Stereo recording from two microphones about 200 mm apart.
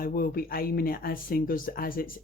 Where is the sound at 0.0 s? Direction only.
45° left (ahead or behind).